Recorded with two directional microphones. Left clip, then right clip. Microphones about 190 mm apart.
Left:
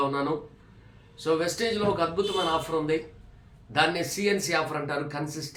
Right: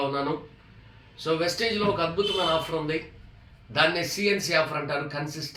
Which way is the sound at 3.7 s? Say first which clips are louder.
Right 1 dB; 15° left (ahead or behind).